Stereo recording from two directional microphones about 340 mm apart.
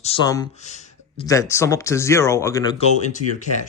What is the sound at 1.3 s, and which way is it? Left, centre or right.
Speech, centre.